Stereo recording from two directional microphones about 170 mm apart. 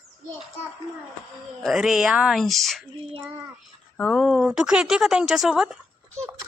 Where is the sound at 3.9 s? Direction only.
5° left (ahead or behind).